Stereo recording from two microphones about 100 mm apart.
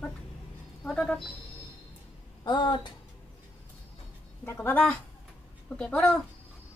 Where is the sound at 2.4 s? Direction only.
50° left (ahead or behind).